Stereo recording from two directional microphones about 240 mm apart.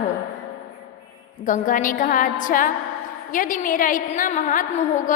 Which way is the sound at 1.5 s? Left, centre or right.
Left.